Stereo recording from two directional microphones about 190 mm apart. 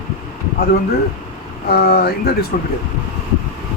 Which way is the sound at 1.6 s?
55° left (ahead or behind).